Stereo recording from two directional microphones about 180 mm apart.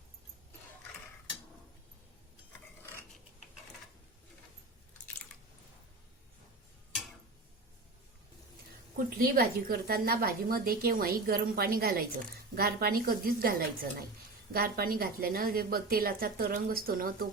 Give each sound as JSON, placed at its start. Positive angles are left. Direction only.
{"t": 9.0, "sound": "a woman's voice", "side_deg": -55}